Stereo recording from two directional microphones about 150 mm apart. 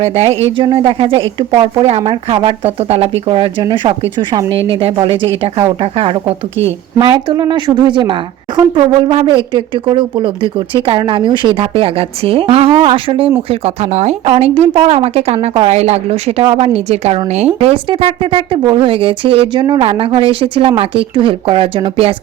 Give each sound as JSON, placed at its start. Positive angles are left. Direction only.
{"t": 0.0, "sound": "a woman's voice", "side_deg": -40}
{"t": 7.0, "sound": "a woman's voice", "side_deg": -30}